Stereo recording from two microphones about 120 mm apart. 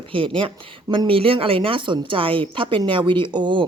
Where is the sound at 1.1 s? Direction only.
50° right (ahead or behind).